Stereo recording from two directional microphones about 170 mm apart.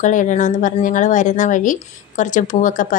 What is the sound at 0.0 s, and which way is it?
A woman's voice, 50° left (ahead or behind).